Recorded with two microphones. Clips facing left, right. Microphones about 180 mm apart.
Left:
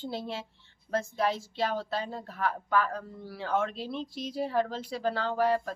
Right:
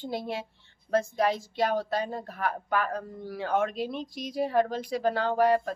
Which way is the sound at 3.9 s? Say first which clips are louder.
Right 2 dB; 15° right (ahead or behind).